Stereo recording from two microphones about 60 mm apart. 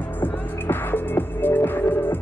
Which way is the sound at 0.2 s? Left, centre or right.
Left.